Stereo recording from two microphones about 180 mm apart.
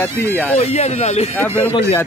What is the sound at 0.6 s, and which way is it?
Speech, 40° left (ahead or behind).